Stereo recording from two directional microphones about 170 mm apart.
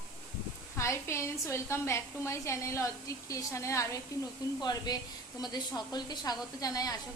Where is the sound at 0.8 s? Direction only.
15° left (ahead or behind).